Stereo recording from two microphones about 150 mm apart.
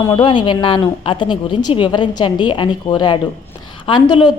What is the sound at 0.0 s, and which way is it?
A woman's voice, 30° left (ahead or behind).